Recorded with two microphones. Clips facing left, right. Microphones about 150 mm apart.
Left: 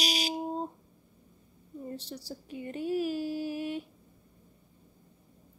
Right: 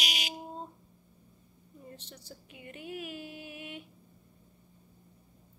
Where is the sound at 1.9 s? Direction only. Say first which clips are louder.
Left 9 dB; 35° left (ahead or behind).